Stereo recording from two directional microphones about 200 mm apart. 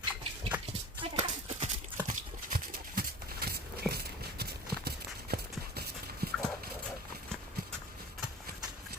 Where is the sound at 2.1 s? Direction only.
45° right (ahead or behind).